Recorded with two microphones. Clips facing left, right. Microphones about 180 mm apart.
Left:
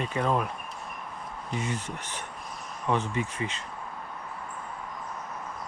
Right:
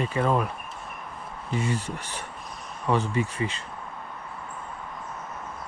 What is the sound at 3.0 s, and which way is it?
Speech, 35° right (ahead or behind).